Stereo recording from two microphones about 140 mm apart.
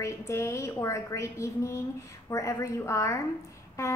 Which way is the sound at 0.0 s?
20° left (ahead or behind).